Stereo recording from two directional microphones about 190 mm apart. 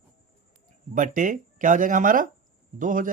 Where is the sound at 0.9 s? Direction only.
45° right (ahead or behind).